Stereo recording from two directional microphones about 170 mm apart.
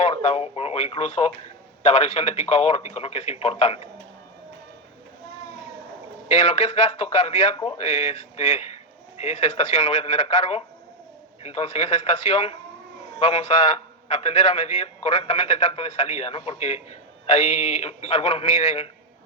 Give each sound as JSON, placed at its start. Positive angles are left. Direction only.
{"t": 0.0, "sound": "a man's voice", "side_deg": 40}
{"t": 6.2, "sound": "a man's voice", "side_deg": 40}